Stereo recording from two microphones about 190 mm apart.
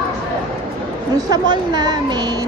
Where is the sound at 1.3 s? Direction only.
20° right (ahead or behind).